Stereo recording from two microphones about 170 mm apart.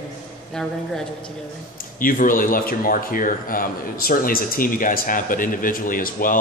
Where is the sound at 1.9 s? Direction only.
55° left (ahead or behind).